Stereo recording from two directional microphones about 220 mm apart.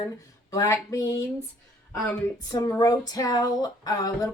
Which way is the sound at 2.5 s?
15° left (ahead or behind).